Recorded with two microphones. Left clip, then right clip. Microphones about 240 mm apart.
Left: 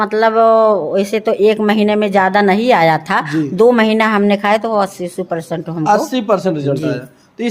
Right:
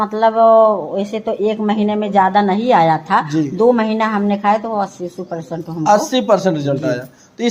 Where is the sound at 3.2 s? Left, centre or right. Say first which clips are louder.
Left 1 dB; centre.